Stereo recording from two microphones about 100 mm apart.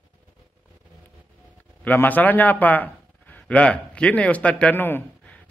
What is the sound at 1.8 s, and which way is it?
A man's voice, 15° left (ahead or behind).